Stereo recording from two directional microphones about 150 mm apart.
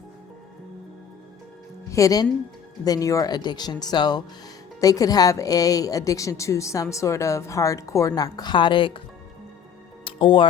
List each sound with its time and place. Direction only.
1.9 s a woman's voice: 20° left (ahead or behind)
10.0 s music: 35° left (ahead or behind)